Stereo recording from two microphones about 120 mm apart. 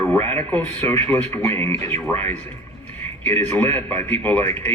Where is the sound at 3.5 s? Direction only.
20° left (ahead or behind).